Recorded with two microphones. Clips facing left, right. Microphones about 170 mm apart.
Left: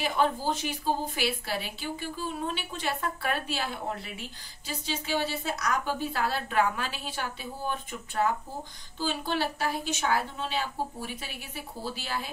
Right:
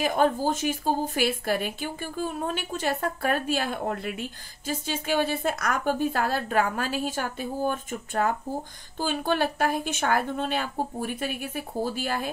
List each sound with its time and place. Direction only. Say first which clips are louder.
0.0 s a woman's voice: right 4 dB; 45° right (ahead or behind)